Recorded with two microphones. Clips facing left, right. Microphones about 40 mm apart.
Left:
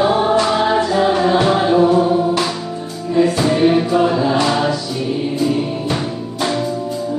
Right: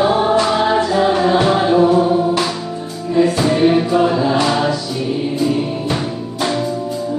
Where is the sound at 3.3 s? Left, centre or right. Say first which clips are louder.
Even; centre.